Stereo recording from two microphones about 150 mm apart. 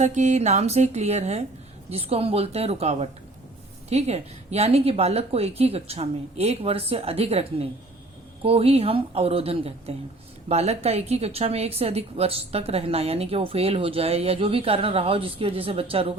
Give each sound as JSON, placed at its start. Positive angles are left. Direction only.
{"t": 0.0, "sound": "a woman's voice", "side_deg": -50}